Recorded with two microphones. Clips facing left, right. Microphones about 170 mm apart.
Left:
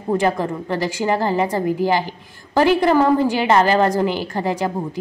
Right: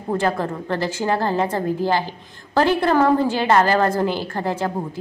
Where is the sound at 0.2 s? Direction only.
15° left (ahead or behind).